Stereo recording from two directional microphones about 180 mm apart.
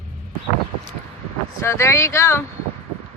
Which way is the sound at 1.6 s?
15° left (ahead or behind).